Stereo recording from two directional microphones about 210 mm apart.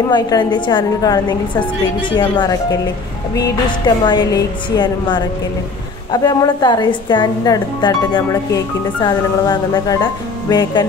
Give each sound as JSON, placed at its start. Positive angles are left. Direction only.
{"t": 0.1, "sound": "speech", "side_deg": 20}